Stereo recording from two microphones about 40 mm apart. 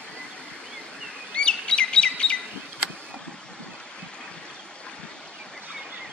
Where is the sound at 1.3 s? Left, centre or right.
Left.